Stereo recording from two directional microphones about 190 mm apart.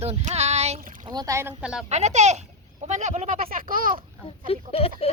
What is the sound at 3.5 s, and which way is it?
Speech, 45° right (ahead or behind).